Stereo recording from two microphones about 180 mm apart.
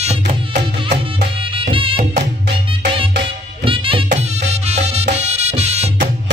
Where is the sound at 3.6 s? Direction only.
30° right (ahead or behind).